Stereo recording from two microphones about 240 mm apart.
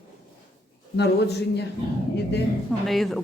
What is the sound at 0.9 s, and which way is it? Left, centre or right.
Speech, left.